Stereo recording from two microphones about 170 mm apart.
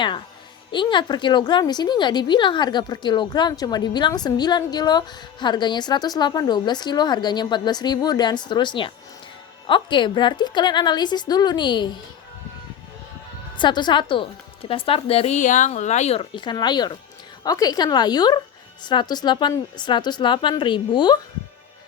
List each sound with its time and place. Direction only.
0.7 s a woman's voice: 30° left (ahead or behind)
13.6 s a woman's voice: 25° left (ahead or behind)